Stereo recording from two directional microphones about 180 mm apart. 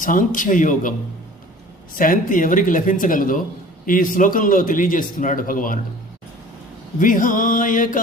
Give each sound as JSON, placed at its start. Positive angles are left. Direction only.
{"t": 0.0, "sound": "a man's voice", "side_deg": 50}
{"t": 7.0, "sound": "a man's voice", "side_deg": 50}